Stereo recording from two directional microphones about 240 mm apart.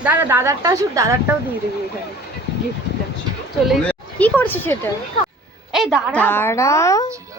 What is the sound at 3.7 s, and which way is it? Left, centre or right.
Speech, centre.